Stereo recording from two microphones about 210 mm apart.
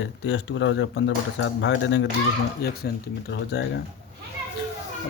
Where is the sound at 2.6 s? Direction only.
50° left (ahead or behind).